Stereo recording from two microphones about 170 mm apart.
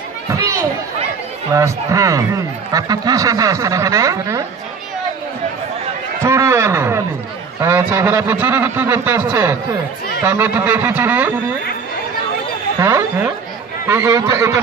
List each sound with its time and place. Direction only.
0.3 s a sound: 15° right (ahead or behind)
1.5 s speech: 20° right (ahead or behind)
6.2 s speech: 20° right (ahead or behind)
12.8 s speech: 15° right (ahead or behind)